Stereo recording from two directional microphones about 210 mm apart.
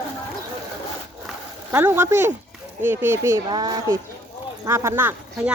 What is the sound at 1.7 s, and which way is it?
Speech, 10° right (ahead or behind).